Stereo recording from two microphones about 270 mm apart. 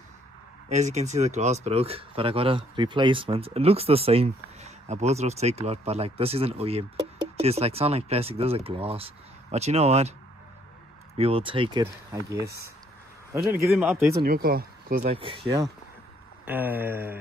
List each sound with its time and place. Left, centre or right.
0.7 s speech: right
11.1 s a man's voice: right; by 14.1 s centre
14.1 s speech: right; by 17.2 s centre